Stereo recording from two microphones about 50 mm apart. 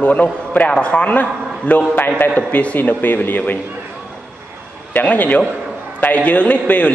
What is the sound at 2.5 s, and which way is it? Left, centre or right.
Speech, left.